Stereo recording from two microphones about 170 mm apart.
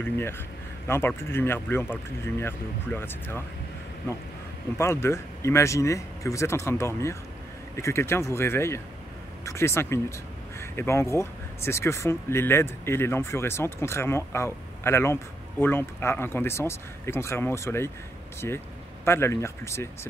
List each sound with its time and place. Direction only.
0.0 s speech: 15° left (ahead or behind)
4.7 s speech: 15° left (ahead or behind)